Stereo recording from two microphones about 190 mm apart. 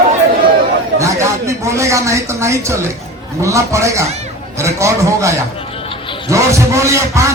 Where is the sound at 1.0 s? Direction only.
15° right (ahead or behind).